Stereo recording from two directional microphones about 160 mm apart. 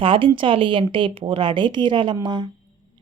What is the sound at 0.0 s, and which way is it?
A woman's voice, 30° right (ahead or behind).